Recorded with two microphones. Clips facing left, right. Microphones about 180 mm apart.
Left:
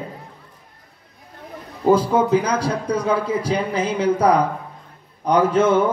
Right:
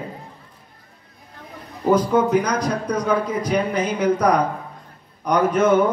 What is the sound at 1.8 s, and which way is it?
A man's voice, 30° left (ahead or behind).